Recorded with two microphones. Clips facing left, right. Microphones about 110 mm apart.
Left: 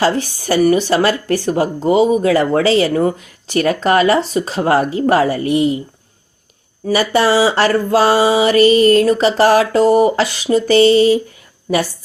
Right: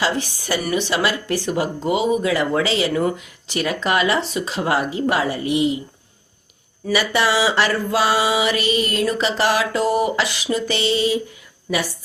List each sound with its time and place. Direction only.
0.0 s speech: 40° left (ahead or behind)
6.8 s speech: 40° left (ahead or behind)